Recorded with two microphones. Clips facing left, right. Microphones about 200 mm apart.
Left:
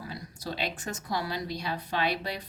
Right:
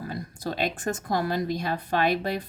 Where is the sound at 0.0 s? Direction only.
50° right (ahead or behind).